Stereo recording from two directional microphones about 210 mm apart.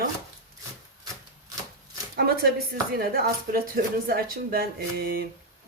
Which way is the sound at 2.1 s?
45° right (ahead or behind).